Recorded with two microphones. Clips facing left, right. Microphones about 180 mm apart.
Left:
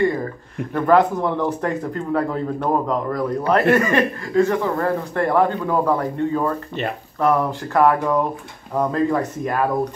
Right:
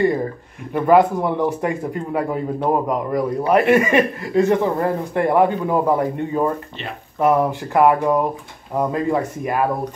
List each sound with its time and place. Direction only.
0.7 s speech: 10° right (ahead or behind)